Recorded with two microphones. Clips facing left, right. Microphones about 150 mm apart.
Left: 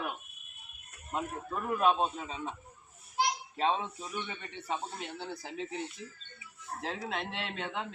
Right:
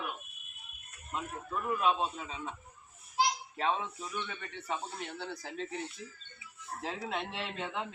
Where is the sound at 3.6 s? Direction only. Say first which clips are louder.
Left 3 dB; 25° left (ahead or behind).